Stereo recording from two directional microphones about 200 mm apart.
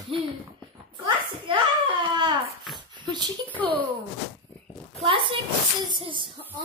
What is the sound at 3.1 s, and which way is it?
Speech, 20° right (ahead or behind).